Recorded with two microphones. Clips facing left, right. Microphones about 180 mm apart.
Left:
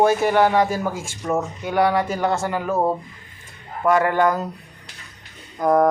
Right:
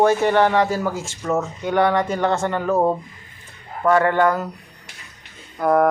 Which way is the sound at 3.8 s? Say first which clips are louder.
Right 1 dB; 15° left (ahead or behind).